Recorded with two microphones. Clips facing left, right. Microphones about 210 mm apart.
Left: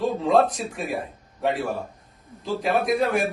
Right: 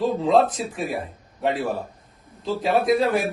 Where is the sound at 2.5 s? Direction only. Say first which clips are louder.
Right 3 dB; centre (ahead or behind).